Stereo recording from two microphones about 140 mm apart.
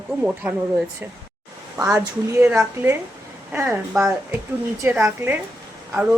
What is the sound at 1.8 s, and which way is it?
A woman's voice, 20° right (ahead or behind).